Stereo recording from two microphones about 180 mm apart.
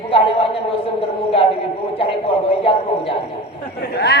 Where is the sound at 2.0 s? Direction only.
30° left (ahead or behind).